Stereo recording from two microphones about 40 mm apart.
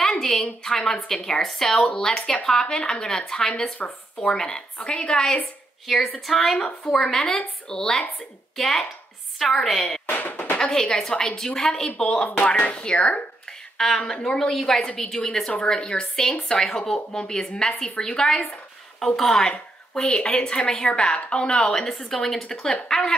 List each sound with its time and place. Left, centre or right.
0.2 s a woman's voice: centre
2.0 s a woman's voice: centre
5.9 s a woman's voice: centre
10.0 s speech: left
10.6 s a woman's voice: centre
12.5 s a woman's voice: left
13.5 s a woman's voice: centre
14.5 s a woman's voice: centre
19.9 s a woman's voice: left